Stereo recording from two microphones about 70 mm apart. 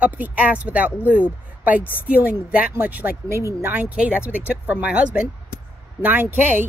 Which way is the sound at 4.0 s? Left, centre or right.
Centre.